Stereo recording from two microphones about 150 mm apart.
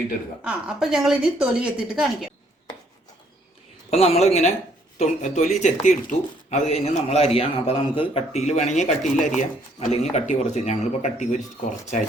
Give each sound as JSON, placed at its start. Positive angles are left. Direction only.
{"t": 0.4, "sound": "a woman's voice", "side_deg": -5}
{"t": 3.8, "sound": "speech", "side_deg": 45}